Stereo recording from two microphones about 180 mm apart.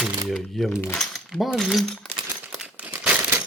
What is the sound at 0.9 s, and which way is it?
Speech, centre (ahead or behind).